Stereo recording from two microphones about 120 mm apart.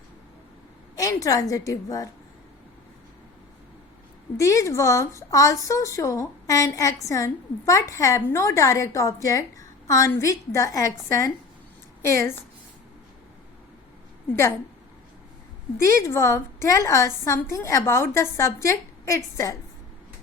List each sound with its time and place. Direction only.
0.9 s a woman's voice: 30° left (ahead or behind)
4.4 s a woman's voice: 25° left (ahead or behind)
15.8 s a woman's voice: 25° left (ahead or behind)